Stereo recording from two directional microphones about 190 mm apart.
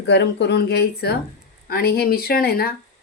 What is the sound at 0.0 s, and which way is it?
Speech, 65° left (ahead or behind).